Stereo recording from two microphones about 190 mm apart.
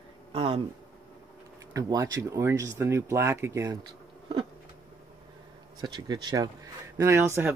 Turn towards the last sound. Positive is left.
turn(degrees=-15)  # may be behind; listen again after turning